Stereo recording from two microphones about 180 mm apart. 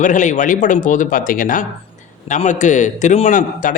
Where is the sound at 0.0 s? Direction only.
45° left (ahead or behind).